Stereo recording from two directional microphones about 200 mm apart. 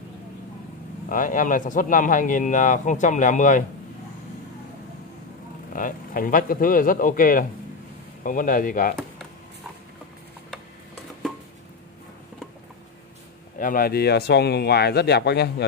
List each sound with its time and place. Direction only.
1.0 s speech: 40° left (ahead or behind)
5.7 s speech: 45° left (ahead or behind)
13.6 s speech: 45° left (ahead or behind)